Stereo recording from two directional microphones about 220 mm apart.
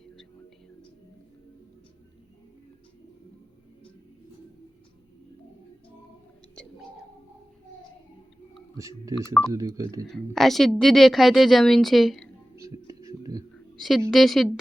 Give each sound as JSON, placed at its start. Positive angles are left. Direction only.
{"t": 8.7, "sound": "speech", "side_deg": -15}
{"t": 10.3, "sound": "a woman's voice", "side_deg": 0}
{"t": 12.5, "sound": "music", "side_deg": -15}
{"t": 13.5, "sound": "a sound", "side_deg": 0}
{"t": 14.1, "sound": "a woman's voice", "side_deg": 0}